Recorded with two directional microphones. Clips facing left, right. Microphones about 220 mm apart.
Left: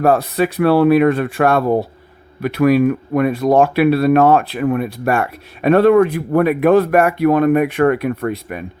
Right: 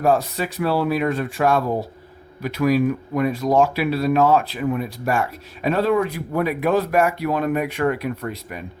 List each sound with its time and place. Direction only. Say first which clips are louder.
0.0 s speech: left 5 dB; 65° left (ahead or behind)